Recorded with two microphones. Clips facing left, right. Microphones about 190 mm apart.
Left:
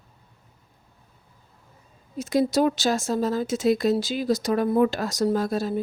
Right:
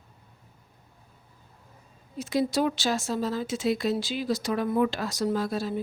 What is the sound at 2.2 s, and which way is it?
Speech, 45° left (ahead or behind).